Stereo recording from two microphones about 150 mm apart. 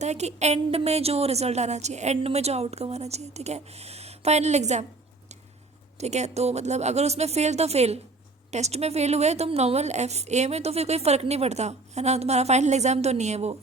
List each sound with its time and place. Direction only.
0.0 s a woman's voice: 50° right (ahead or behind)
6.0 s a woman's voice: 50° right (ahead or behind)